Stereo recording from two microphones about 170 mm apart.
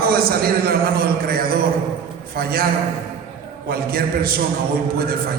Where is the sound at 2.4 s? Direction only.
65° right (ahead or behind).